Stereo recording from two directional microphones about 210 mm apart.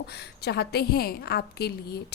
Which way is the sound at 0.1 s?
50° left (ahead or behind).